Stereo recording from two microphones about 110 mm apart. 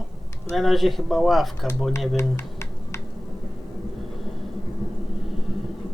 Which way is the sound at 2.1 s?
25° left (ahead or behind).